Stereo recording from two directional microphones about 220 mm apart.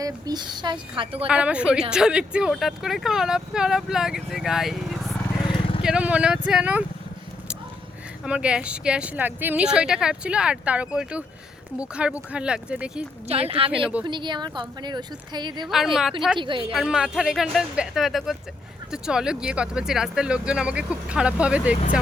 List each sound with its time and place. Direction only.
0.0 s a woman's voice: 20° right (ahead or behind)
1.3 s speech: 5° right (ahead or behind)
5.5 s vehicle: 25° left (ahead or behind)
5.8 s speech: 5° right (ahead or behind)
8.2 s speech: 5° right (ahead or behind)
13.2 s a woman's voice: 25° right (ahead or behind)
13.7 s speech: 5° right (ahead or behind)
14.0 s a woman's voice: 20° right (ahead or behind)
15.6 s speech: centre (ahead or behind)
16.4 s a woman's voice: 20° right (ahead or behind)
16.7 s speech: centre (ahead or behind)